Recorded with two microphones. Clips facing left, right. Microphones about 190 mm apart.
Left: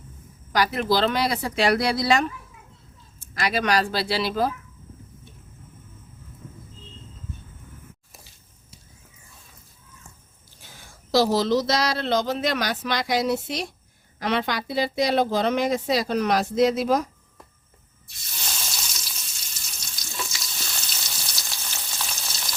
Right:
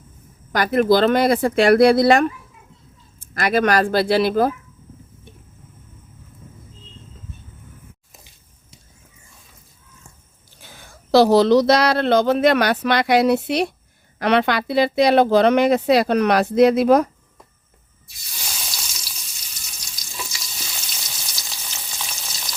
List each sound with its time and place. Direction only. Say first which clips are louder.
0.5 s speech: right 6 dB; 50° right (ahead or behind)
10.8 s speech: right 7 dB; 65° right (ahead or behind)
18.3 s frying: even; 5° right (ahead or behind)